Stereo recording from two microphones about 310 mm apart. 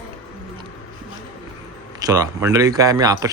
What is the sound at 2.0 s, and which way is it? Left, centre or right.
Speech, centre.